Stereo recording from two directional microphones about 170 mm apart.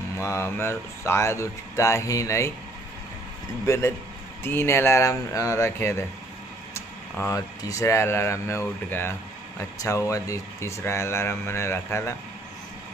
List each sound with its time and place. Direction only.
0.2 s speech: 15° left (ahead or behind)
3.6 s speech: 15° left (ahead or behind)